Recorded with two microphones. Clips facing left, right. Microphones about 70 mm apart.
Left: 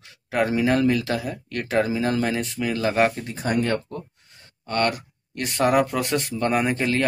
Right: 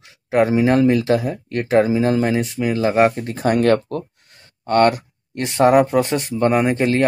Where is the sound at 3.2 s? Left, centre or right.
Right.